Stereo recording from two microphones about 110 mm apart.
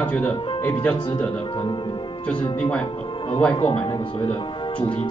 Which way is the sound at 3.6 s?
50° left (ahead or behind).